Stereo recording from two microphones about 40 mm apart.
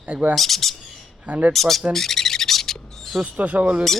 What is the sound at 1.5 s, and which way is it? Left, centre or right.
Speech, centre.